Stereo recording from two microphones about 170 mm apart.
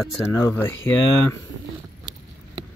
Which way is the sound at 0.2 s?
15° left (ahead or behind).